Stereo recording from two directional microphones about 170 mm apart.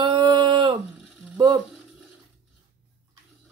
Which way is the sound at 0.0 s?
25° right (ahead or behind).